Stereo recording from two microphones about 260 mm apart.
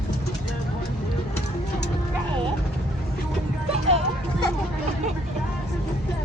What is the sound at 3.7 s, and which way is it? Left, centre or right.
Music, right.